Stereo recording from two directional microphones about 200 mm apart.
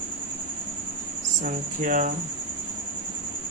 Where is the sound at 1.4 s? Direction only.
40° right (ahead or behind).